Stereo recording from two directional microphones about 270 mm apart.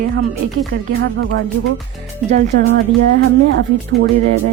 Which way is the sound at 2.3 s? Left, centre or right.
Right.